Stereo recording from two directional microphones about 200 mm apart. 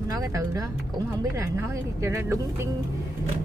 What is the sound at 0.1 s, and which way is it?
Speech, 15° right (ahead or behind).